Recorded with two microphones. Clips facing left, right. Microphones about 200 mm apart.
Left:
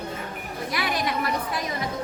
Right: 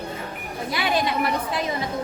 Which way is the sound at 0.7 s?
25° right (ahead or behind).